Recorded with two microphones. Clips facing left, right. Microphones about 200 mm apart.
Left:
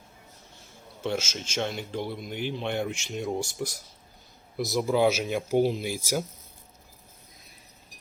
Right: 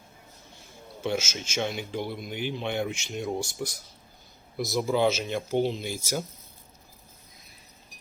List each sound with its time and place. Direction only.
1.0 s speech: 5° right (ahead or behind); by 6.2 s 10° left (ahead or behind)